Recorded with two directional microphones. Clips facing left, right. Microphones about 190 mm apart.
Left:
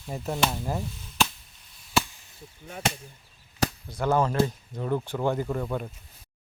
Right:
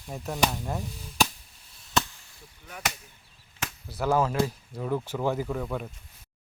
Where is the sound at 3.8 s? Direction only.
5° right (ahead or behind).